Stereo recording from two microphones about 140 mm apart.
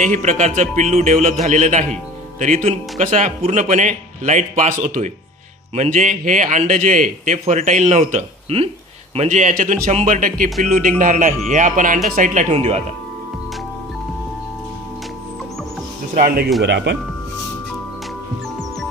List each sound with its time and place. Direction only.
0.0 s a man's voice: 55° right (ahead or behind)